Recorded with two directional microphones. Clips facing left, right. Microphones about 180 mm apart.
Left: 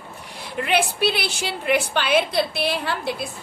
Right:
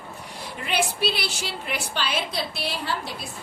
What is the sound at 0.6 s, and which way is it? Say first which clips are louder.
A woman's voice: left 4 dB; 60° left (ahead or behind).